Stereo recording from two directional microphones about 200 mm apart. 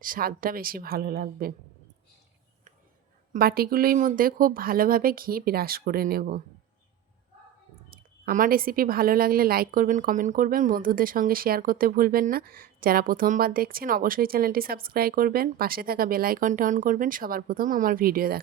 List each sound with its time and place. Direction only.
0.0 s a woman's voice: 45° right (ahead or behind)
3.3 s a woman's voice: 50° right (ahead or behind)
7.9 s a woman's voice: 45° right (ahead or behind)